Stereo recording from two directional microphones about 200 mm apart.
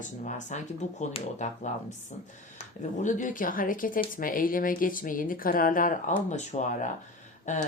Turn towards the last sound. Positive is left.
turn(degrees=40)  # may be behind; listen again after turning